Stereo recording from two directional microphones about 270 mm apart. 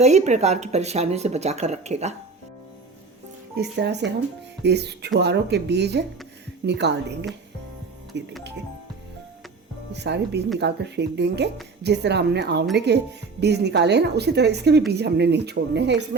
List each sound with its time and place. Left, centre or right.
0.0 s speech: right
3.5 s a woman's voice: right
9.9 s a woman's voice: right